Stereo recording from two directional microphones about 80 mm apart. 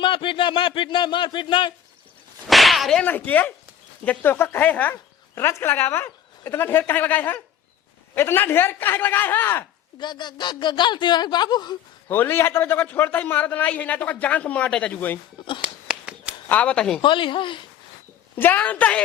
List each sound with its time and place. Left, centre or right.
0.0 s speech: left
2.5 s whip: centre
3.0 s a man's voice: left
5.3 s a man's voice: left
10.0 s speech: left
12.0 s a man's voice: left
15.4 s speech: left
15.6 s a sound: centre
16.5 s speech: centre
17.0 s speech: left
18.3 s a man's voice: left